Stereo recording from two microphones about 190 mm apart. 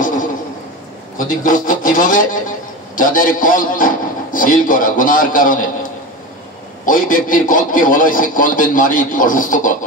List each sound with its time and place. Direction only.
1.1 s a man's voice: 45° left (ahead or behind)
6.9 s a man's voice: 45° left (ahead or behind)